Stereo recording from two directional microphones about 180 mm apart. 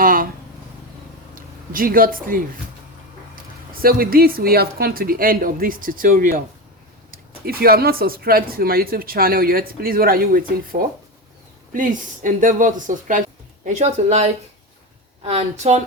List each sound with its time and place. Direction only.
0.0 s a sound: 50° right (ahead or behind)
1.4 s speech: 50° right (ahead or behind)
7.4 s a woman's voice: 60° right (ahead or behind); by 15.8 s 35° right (ahead or behind)